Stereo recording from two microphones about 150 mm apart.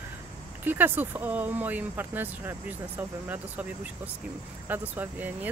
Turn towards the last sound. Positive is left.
turn(degrees=-10)  # may be behind; listen again after turning